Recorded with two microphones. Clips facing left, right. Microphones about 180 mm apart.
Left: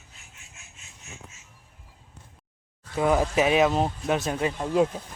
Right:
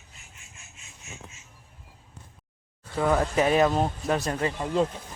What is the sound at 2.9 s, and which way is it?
Speech, 10° left (ahead or behind).